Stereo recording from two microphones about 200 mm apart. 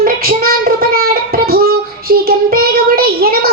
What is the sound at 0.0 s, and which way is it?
Child singing, 50° right (ahead or behind).